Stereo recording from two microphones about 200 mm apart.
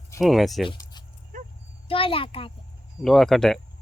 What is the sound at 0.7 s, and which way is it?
Keys jangling, 20° left (ahead or behind).